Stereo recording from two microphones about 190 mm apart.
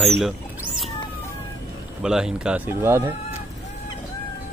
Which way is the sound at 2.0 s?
5° right (ahead or behind).